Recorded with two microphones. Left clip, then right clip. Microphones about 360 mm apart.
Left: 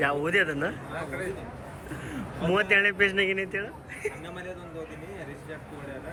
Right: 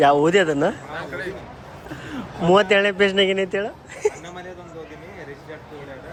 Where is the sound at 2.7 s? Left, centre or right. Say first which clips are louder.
Right 5 dB; centre.